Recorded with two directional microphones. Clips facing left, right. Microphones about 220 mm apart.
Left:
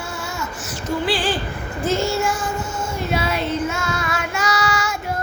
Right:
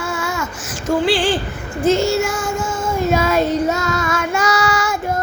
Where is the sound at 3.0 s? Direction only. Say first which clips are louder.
Right 7 dB; 45° right (ahead or behind).